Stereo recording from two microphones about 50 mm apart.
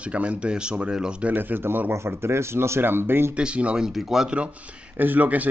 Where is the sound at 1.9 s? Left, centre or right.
Right.